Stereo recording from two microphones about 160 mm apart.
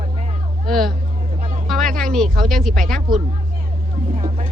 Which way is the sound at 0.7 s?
Centre (ahead or behind).